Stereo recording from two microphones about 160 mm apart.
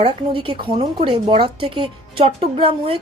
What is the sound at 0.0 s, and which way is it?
Speech, 30° right (ahead or behind).